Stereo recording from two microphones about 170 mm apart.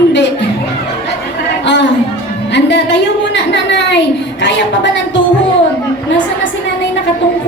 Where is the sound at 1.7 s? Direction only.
90° left.